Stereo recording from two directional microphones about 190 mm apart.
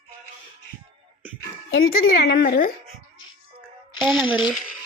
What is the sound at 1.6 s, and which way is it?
Speech, 90° left.